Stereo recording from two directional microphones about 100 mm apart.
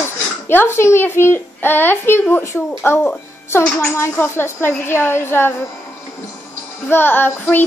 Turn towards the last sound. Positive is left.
turn(degrees=20)  # may be behind; listen again after turning